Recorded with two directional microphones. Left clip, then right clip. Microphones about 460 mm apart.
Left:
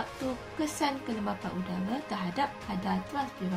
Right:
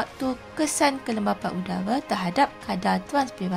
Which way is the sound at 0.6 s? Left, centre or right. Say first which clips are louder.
Right 9 dB; centre.